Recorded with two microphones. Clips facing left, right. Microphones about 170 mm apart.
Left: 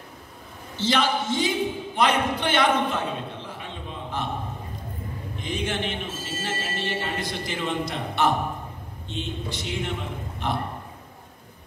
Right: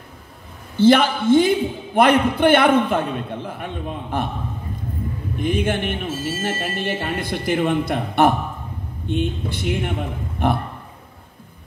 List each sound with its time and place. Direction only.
0.7 s speech: 55° right (ahead or behind)
3.4 s a sound: 55° right (ahead or behind)
5.4 s speech: 55° right (ahead or behind)